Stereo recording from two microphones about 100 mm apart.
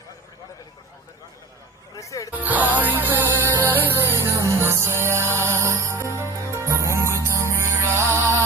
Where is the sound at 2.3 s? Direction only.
15° right (ahead or behind).